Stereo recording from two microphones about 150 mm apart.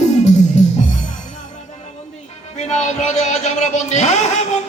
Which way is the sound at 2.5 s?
50° left (ahead or behind).